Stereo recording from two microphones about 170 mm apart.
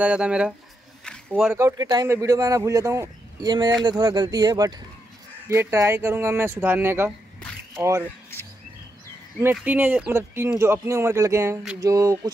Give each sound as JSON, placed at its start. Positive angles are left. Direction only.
{"t": 0.0, "sound": "speech", "side_deg": -5}
{"t": 1.0, "sound": "a sound", "side_deg": 0}
{"t": 1.5, "sound": "speech", "side_deg": -15}
{"t": 9.6, "sound": "speech", "side_deg": -10}